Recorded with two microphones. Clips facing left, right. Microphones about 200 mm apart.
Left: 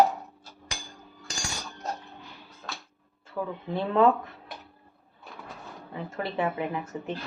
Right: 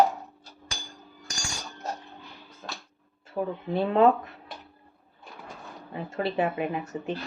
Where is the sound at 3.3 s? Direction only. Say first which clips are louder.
Right 3 dB; 25° right (ahead or behind).